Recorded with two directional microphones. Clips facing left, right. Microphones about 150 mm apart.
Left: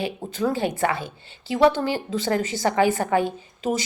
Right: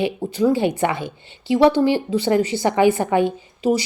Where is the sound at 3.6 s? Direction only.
50° left (ahead or behind).